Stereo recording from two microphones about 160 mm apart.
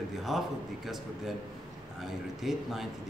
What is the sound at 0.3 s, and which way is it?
Speech, centre (ahead or behind).